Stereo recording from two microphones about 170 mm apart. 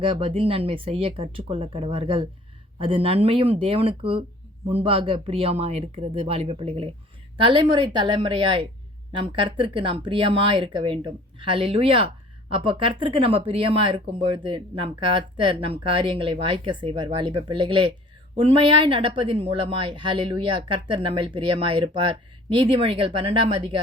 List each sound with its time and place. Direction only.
0.0 s a woman's voice: 30° right (ahead or behind)